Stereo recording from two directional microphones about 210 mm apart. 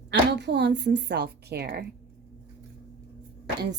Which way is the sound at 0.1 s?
55° right (ahead or behind).